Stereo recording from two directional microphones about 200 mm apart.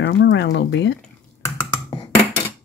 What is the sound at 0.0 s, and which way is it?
Speech, 60° left (ahead or behind).